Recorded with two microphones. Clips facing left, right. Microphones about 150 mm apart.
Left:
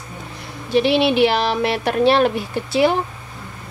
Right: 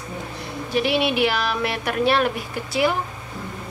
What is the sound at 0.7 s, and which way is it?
Speech, 30° left (ahead or behind).